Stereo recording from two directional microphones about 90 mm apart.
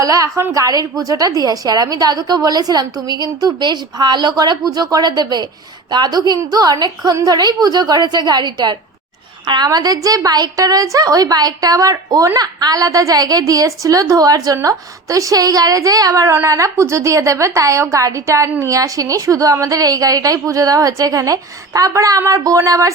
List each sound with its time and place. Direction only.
0.0 s a woman's voice: 40° right (ahead or behind)